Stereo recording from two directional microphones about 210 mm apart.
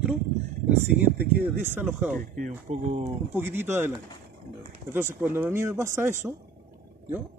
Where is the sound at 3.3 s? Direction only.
10° right (ahead or behind).